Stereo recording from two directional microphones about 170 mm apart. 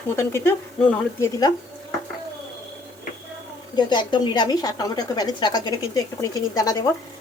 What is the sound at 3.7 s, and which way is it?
Speech, 25° left (ahead or behind).